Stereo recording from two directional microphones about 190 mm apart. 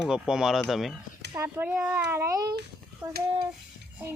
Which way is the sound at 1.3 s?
10° right (ahead or behind).